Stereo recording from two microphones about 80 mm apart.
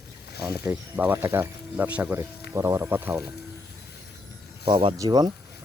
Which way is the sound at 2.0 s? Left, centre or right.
Right.